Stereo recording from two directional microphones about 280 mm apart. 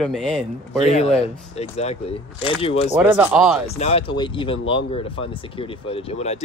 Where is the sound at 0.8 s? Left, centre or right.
Left.